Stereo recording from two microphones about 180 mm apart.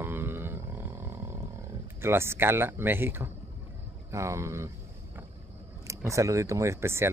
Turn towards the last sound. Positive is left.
turn(degrees=-15)  # may be behind; listen again after turning